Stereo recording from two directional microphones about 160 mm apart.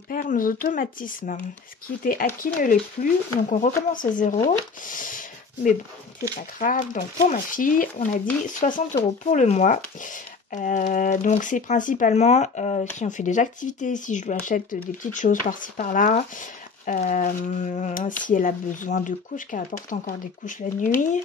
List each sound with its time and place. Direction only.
0.1 s speech: 60° left (ahead or behind)